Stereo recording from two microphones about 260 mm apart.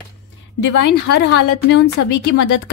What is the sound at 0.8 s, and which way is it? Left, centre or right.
Speech, left.